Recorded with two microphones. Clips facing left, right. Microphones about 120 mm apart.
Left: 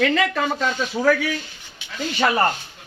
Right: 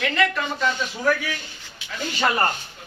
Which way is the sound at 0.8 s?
90° left.